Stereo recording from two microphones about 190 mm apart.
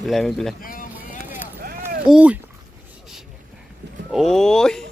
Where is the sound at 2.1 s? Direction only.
5° right (ahead or behind).